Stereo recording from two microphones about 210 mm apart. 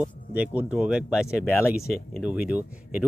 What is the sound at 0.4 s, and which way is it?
Speech, 5° right (ahead or behind).